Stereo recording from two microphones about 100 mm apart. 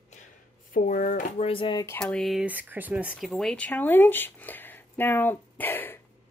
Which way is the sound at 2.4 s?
15° right (ahead or behind).